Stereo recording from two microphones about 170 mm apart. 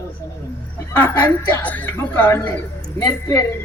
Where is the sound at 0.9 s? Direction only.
10° left (ahead or behind).